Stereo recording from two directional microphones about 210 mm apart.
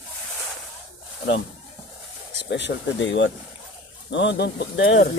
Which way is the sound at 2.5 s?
60° left (ahead or behind).